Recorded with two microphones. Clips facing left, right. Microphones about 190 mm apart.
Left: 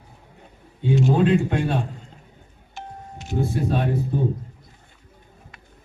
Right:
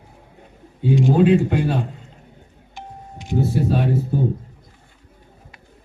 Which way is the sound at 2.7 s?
15° right (ahead or behind).